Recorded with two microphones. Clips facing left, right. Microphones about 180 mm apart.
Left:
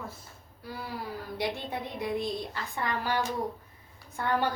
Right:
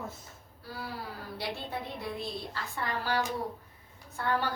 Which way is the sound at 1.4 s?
20° left (ahead or behind).